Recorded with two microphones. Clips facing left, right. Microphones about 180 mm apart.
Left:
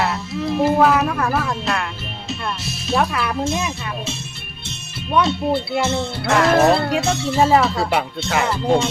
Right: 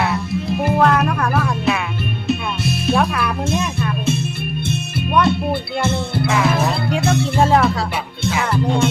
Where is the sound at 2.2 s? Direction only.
55° right (ahead or behind).